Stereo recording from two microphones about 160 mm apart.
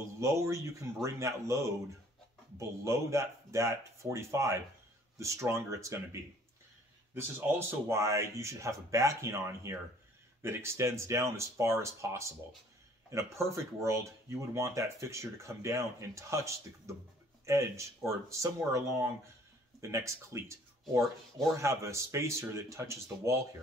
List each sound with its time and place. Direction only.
0.2 s speech: 20° right (ahead or behind)
7.3 s speech: 15° right (ahead or behind)
21.5 s speech: 20° right (ahead or behind)